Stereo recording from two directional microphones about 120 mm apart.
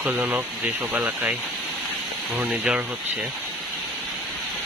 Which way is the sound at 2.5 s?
10° right (ahead or behind).